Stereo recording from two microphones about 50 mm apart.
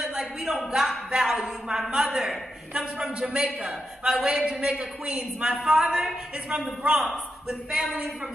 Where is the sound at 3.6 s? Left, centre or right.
Centre.